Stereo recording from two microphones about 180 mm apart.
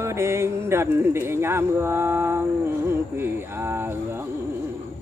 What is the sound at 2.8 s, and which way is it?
Music, 15° right (ahead or behind).